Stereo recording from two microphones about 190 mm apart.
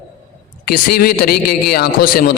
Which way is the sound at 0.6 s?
50° left (ahead or behind).